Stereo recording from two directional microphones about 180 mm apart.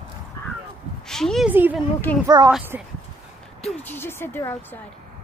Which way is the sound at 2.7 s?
10° right (ahead or behind).